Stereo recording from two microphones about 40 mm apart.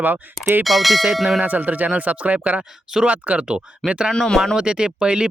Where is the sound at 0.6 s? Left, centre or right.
Centre.